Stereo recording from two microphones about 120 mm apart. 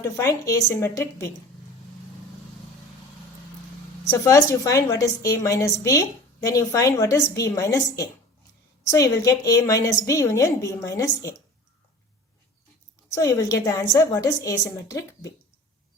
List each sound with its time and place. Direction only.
0.0 s a woman's voice: 25° left (ahead or behind)
4.2 s a woman's voice: 25° left (ahead or behind)
13.1 s a woman's voice: 25° left (ahead or behind)